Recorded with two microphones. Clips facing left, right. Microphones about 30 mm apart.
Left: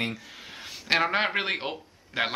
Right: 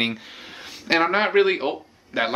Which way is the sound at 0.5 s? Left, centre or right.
Centre.